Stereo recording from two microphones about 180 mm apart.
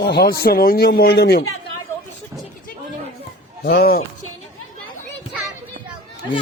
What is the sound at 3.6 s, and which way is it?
Speech, 55° left (ahead or behind).